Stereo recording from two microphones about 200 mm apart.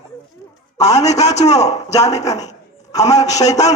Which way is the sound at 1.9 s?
15° left (ahead or behind).